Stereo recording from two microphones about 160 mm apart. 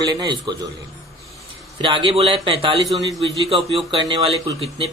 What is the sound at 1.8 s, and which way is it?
A man's voice, 30° right (ahead or behind).